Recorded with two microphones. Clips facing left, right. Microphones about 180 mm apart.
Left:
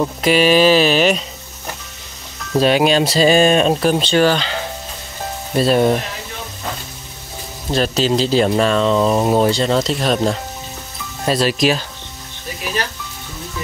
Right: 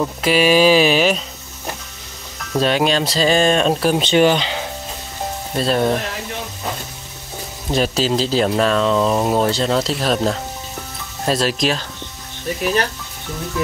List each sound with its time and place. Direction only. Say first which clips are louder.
0.0 s speech: left 2 dB; 5° right (ahead or behind)
2.6 s speech: left 3 dB; 10° left (ahead or behind)
4.0 s speech: right 1 dB; 20° right (ahead or behind)
5.6 s speech: left 4 dB; 5° left (ahead or behind)
7.7 s speech: left 1 dB; 5° right (ahead or behind)